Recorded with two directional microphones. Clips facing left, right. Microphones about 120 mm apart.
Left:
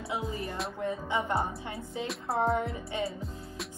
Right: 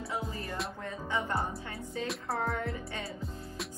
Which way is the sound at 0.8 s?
20° left (ahead or behind).